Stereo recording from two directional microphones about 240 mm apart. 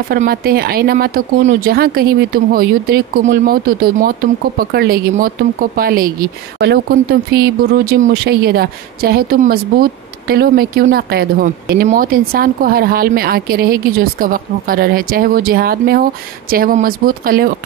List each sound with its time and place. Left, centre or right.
0.1 s speech: right